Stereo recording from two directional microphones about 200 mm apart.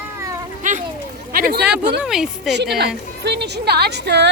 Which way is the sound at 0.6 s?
40° right (ahead or behind).